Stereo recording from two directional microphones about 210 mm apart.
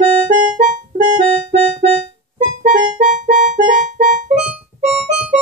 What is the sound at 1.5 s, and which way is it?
Music, 30° right (ahead or behind).